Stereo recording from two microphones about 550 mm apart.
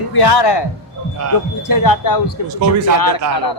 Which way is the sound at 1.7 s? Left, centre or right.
Left.